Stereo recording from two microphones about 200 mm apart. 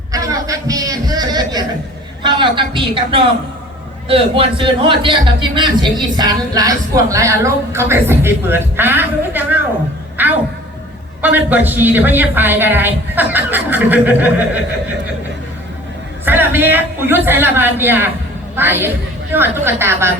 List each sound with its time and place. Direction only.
0.1 s a man's voice: 15° right (ahead or behind)
10.2 s music: 10° right (ahead or behind)
11.2 s a man's voice: 10° right (ahead or behind)
16.2 s a man's voice: 10° right (ahead or behind)